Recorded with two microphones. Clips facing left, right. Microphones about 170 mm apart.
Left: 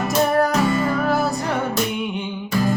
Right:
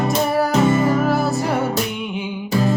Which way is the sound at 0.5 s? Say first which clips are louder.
Right 4 dB; 25° right (ahead or behind).